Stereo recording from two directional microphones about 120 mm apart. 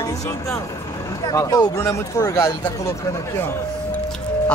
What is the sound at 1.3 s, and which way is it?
Speech, 25° left (ahead or behind).